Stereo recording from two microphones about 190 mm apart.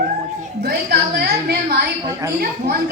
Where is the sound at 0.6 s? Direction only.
55° right (ahead or behind).